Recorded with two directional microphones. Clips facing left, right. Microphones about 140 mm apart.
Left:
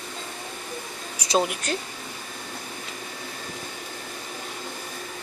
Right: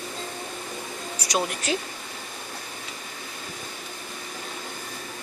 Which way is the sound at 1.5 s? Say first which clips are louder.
Right 2 dB; centre (ahead or behind).